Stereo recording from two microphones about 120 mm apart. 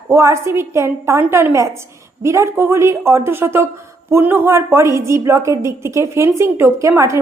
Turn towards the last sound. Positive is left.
turn(degrees=-25)  # may be behind; listen again after turning